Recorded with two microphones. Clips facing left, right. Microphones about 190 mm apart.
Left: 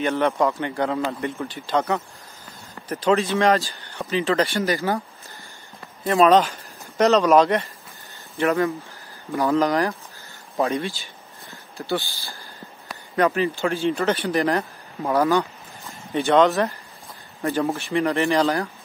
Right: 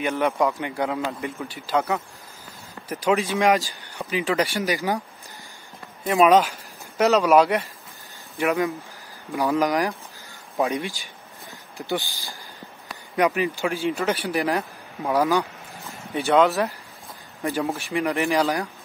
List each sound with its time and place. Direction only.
0.0 s speech: 5° right (ahead or behind)
6.0 s speech: 10° right (ahead or behind)
17.4 s speech: 15° right (ahead or behind)